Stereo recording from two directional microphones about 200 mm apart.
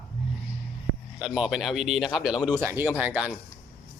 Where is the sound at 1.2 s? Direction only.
5° right (ahead or behind).